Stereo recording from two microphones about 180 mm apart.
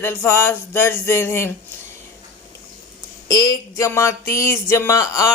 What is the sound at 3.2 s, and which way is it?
Speech, 20° left (ahead or behind).